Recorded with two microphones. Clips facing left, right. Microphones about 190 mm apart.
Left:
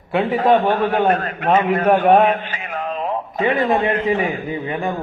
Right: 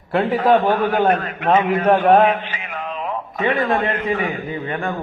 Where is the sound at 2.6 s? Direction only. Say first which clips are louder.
Left 3 dB; 35° left (ahead or behind).